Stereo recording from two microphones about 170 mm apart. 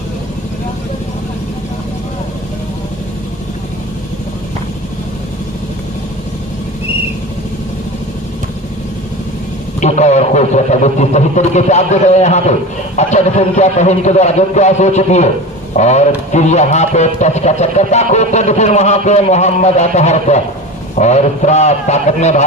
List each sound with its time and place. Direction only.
9.8 s a man's voice: 40° left (ahead or behind)